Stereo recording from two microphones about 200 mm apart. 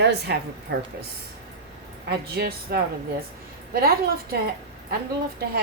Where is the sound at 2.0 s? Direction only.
50° right (ahead or behind).